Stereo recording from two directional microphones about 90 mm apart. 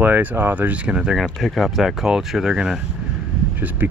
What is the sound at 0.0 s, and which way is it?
Speech, 20° right (ahead or behind).